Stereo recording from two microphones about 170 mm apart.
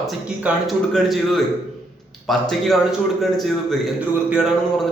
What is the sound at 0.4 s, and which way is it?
A man's voice, 5° right (ahead or behind).